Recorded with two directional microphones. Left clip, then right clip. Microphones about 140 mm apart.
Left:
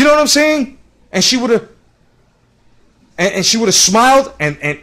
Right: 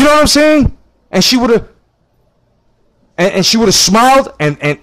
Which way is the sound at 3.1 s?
50° right (ahead or behind).